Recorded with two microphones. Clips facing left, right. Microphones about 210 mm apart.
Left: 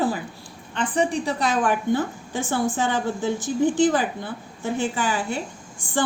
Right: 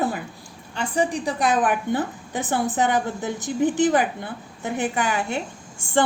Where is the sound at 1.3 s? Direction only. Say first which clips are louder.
Right 1 dB; 15° right (ahead or behind).